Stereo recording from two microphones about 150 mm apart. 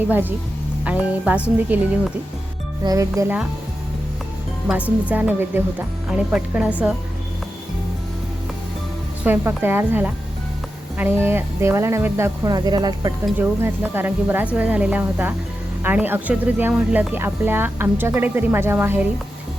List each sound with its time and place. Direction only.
0.1 s speech: 10° right (ahead or behind)
2.8 s speech: 20° right (ahead or behind)
5.0 s a woman's voice: 10° right (ahead or behind)
9.2 s speech: 15° right (ahead or behind)
13.4 s speech: 15° right (ahead or behind)